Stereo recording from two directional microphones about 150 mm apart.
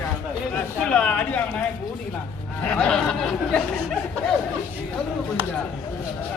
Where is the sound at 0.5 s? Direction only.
5° left (ahead or behind).